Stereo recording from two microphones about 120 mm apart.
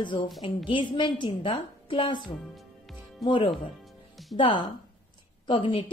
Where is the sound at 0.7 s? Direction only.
45° left (ahead or behind).